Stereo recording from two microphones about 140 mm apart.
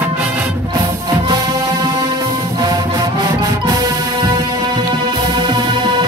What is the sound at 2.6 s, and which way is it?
Music, 30° right (ahead or behind).